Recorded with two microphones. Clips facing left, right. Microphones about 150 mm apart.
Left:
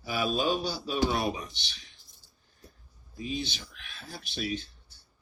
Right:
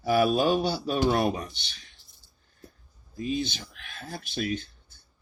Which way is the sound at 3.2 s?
50° right (ahead or behind).